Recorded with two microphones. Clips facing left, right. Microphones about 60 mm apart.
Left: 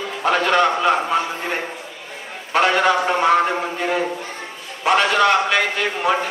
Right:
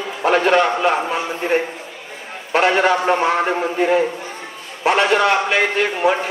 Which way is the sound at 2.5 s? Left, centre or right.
Right.